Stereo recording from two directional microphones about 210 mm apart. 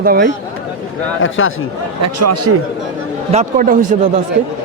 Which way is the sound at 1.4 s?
70° left (ahead or behind).